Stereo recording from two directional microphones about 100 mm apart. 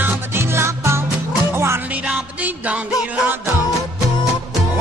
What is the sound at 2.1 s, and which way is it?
Music, 15° right (ahead or behind).